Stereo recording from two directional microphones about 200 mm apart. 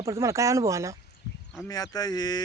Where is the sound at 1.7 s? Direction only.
20° left (ahead or behind).